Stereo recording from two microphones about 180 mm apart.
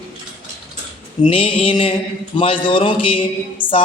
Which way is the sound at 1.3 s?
30° left (ahead or behind).